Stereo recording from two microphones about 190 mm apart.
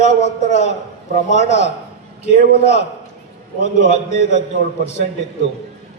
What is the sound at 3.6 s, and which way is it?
Speech, 65° left (ahead or behind).